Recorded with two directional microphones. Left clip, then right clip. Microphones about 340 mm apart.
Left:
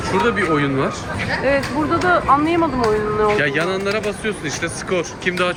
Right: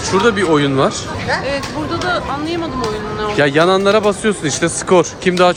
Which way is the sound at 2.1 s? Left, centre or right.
Centre.